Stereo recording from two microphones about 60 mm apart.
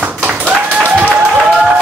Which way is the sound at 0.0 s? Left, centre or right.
Right.